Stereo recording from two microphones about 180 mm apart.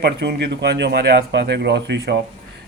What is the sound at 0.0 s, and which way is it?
Speech, 65° right (ahead or behind).